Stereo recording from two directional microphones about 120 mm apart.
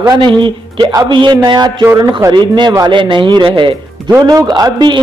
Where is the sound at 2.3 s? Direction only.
40° right (ahead or behind).